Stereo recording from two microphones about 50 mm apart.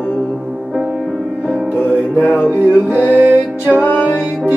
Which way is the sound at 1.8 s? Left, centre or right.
Left.